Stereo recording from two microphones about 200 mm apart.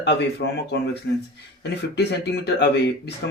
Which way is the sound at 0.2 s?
55° left (ahead or behind).